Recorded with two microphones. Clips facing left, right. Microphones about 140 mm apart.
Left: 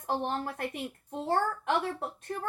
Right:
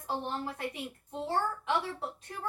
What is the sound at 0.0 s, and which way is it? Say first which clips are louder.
A woman's voice: left 3 dB; 55° left (ahead or behind).